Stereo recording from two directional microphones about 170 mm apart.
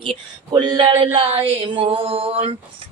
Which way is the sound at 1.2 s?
30° right (ahead or behind).